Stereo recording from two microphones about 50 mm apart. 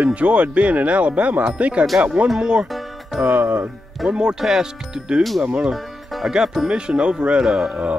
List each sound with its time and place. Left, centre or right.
0.0 s speech: right
2.2 s speech: centre
2.7 s music: centre
3.3 s speech: right
4.1 s speech: centre
6.3 s speech: centre
6.7 s speech: centre